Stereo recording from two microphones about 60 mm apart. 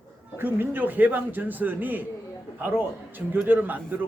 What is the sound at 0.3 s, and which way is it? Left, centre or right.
A man's voice, right.